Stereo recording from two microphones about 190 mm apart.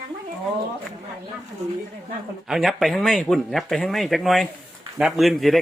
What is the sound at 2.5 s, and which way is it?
Speech, centre (ahead or behind).